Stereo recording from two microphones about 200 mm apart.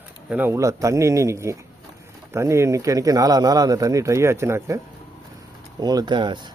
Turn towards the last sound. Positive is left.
turn(degrees=-20)  # may be behind; listen again after turning